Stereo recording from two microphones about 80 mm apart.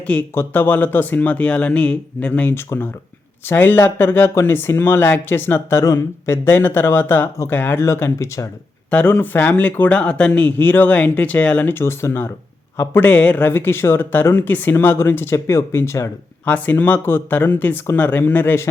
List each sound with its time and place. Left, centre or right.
0.3 s speech: left
5.8 s speech: left
8.9 s speech: centre
11.7 s speech: left
16.5 s speech: left